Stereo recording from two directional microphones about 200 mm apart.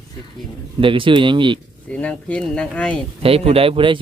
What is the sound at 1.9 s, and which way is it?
Speech, 5° left (ahead or behind).